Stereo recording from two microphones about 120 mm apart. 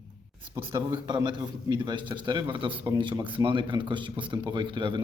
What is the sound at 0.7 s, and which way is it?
A man's voice, 35° right (ahead or behind).